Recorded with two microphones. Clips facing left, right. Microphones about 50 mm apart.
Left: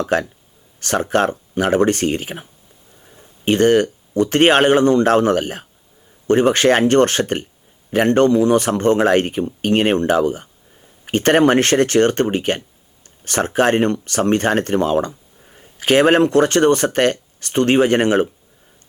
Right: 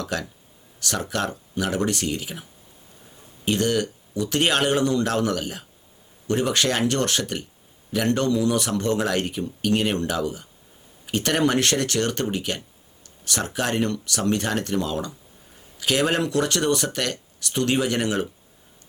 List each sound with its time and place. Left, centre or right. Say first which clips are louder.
0.0 s speech: left 10 dB; left